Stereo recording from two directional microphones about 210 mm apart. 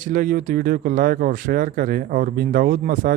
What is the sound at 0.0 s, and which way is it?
Speech, 40° right (ahead or behind).